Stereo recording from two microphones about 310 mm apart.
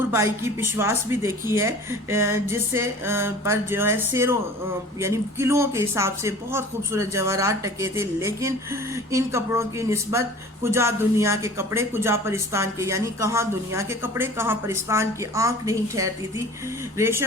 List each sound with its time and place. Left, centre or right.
0.1 s speech: centre